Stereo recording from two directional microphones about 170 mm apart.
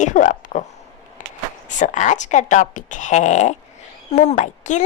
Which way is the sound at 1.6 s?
45° left (ahead or behind).